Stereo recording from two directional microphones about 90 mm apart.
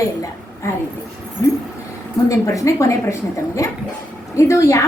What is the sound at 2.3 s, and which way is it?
A woman's voice, 35° left (ahead or behind).